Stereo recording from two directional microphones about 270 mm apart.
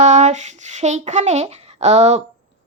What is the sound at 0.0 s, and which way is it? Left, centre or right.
A woman's voice, right.